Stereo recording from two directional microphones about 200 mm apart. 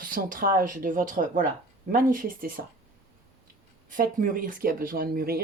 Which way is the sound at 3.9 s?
40° right (ahead or behind).